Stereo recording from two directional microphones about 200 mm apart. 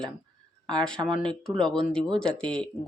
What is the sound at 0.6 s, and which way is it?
Speech, 20° right (ahead or behind).